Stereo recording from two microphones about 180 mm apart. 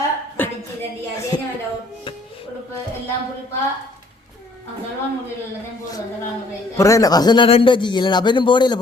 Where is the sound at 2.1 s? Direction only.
30° left (ahead or behind).